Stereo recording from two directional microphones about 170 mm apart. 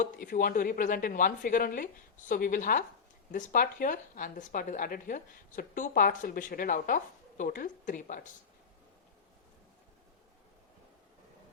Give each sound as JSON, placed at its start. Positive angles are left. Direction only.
{"t": 0.0, "sound": "a woman's voice", "side_deg": 50}